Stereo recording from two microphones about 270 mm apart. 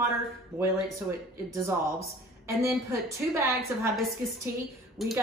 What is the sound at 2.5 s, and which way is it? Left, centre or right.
A woman's voice, centre.